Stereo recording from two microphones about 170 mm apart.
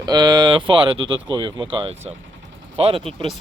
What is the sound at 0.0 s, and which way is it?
Speech, 25° right (ahead or behind).